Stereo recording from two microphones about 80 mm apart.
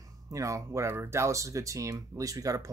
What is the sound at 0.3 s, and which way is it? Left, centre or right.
Speech, right.